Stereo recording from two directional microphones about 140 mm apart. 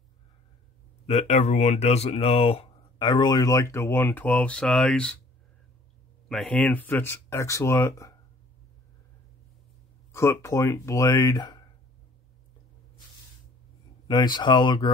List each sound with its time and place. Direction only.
1.0 s speech: 50° left (ahead or behind); by 5.2 s 5° left (ahead or behind)
6.2 s speech: 5° left (ahead or behind); by 8.1 s 20° left (ahead or behind)
10.1 s speech: 20° left (ahead or behind)
14.0 s speech: 30° left (ahead or behind)